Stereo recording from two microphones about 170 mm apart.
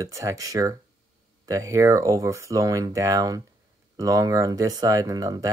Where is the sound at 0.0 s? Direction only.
20° right (ahead or behind).